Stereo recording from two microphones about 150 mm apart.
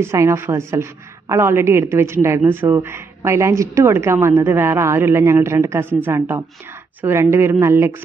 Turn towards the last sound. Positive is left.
turn(degrees=-15)  # may be behind; listen again after turning